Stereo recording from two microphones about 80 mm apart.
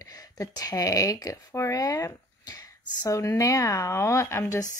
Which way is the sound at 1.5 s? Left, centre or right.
Left.